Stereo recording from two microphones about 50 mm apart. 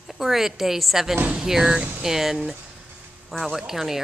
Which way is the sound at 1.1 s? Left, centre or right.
Right.